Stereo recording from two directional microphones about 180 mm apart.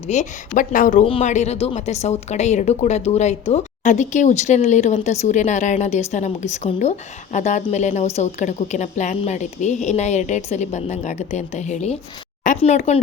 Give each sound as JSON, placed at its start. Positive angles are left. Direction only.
{"t": 0.1, "sound": "speech", "side_deg": 45}
{"t": 1.0, "sound": "speech", "side_deg": 35}